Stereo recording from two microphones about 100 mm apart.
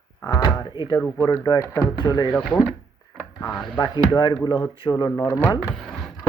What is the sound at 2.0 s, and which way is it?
Speech, 40° left (ahead or behind).